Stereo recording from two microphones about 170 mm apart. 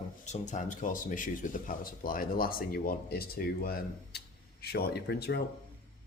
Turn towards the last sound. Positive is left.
turn(degrees=70)  # may be behind; listen again after turning